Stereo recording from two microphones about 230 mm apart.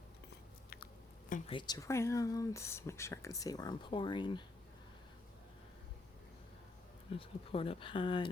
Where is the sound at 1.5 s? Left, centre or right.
Centre.